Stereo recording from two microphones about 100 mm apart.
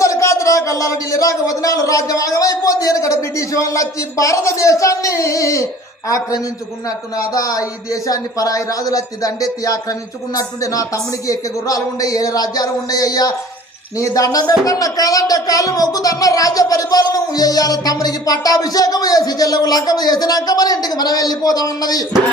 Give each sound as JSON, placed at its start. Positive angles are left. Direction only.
{"t": 0.0, "sound": "speech", "side_deg": 30}